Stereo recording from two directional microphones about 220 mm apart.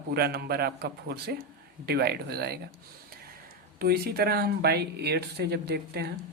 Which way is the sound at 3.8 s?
45° right (ahead or behind).